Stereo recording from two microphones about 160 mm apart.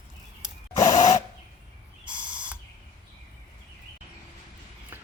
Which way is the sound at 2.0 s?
5° right (ahead or behind).